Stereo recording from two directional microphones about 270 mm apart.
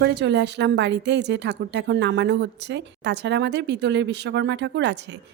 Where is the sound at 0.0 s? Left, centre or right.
Right.